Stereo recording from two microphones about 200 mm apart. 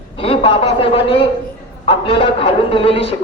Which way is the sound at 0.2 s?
25° left (ahead or behind).